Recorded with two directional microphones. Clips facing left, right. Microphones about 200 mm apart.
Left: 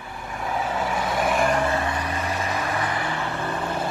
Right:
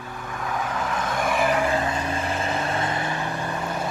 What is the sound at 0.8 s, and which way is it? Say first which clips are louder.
Vehicle: left 2 dB; 10° left (ahead or behind).